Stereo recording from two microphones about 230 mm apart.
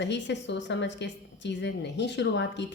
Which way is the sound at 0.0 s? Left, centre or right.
Left.